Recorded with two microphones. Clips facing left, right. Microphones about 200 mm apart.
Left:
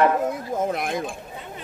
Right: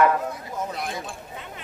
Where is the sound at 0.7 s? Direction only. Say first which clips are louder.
Left 6 dB; 55° left (ahead or behind).